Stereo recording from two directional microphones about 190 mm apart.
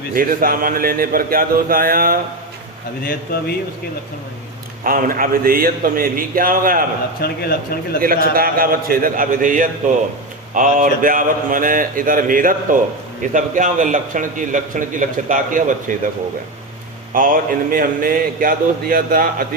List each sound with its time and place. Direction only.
0.1 s a man's voice: 50° right (ahead or behind)
3.0 s speech: 50° left (ahead or behind)
4.8 s a man's voice: 45° right (ahead or behind)
7.2 s speech: 55° left (ahead or behind)
8.0 s a man's voice: 50° right (ahead or behind)
17.2 s a man's voice: 45° right (ahead or behind)